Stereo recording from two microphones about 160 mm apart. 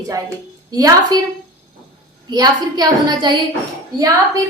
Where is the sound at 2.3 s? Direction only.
25° right (ahead or behind).